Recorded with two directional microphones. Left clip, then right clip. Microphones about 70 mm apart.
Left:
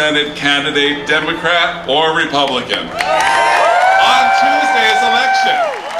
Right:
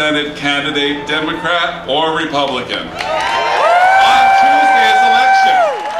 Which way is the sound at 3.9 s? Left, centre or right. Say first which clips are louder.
Right 2 dB; centre.